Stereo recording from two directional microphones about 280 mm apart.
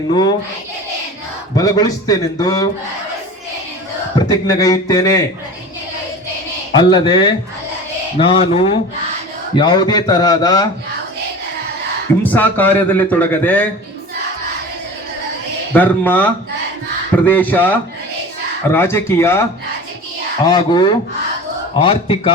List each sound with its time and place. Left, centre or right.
0.1 s a man's voice: centre
1.5 s a man's voice: centre
4.3 s a man's voice: centre
6.7 s a man's voice: centre
12.2 s a man's voice: centre
15.7 s a man's voice: centre
17.2 s a man's voice: centre